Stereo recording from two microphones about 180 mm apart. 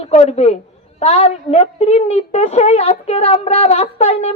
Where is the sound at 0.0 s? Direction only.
35° left (ahead or behind).